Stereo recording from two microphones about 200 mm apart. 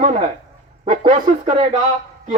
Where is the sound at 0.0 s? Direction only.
35° right (ahead or behind).